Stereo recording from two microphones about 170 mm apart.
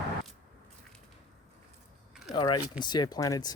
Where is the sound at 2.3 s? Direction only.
25° left (ahead or behind).